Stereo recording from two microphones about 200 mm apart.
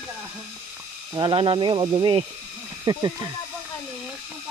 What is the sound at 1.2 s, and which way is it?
Speech, 25° right (ahead or behind).